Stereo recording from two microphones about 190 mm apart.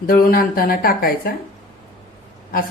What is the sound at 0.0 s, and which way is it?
A woman's voice, 50° left (ahead or behind).